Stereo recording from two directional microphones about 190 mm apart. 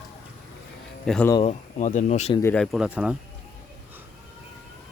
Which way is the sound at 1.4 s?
40° left (ahead or behind).